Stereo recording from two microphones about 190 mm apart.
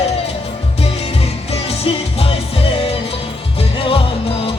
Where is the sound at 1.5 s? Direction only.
30° left (ahead or behind).